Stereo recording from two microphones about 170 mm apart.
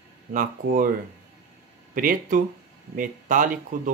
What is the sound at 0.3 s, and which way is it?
Speech, 50° right (ahead or behind).